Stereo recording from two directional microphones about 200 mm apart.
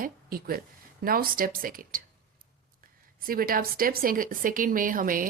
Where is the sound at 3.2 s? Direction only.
45° right (ahead or behind).